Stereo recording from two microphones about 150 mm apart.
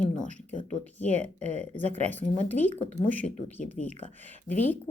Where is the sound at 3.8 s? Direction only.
55° left (ahead or behind).